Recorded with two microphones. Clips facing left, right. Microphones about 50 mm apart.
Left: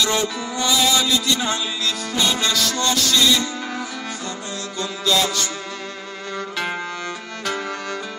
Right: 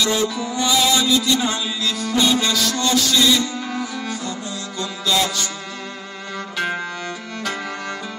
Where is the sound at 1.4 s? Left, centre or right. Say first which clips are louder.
Right 1 dB; centre.